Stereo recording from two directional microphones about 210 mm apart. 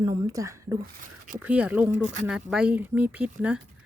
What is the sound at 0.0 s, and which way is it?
Speech, 15° right (ahead or behind).